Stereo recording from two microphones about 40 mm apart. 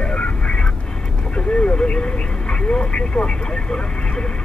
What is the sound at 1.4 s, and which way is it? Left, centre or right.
Vehicle, left.